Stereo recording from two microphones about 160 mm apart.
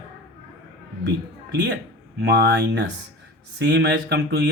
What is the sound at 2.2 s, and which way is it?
Speech, 85° right.